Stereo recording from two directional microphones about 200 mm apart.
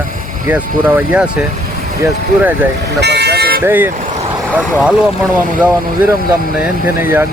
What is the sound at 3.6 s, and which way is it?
Speech, 10° right (ahead or behind).